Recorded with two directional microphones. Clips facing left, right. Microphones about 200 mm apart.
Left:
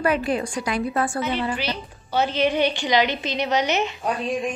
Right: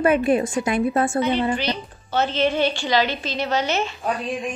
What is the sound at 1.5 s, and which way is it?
A woman's voice, 5° left (ahead or behind).